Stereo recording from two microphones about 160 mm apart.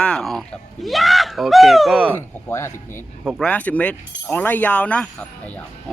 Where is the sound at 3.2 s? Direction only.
Centre (ahead or behind).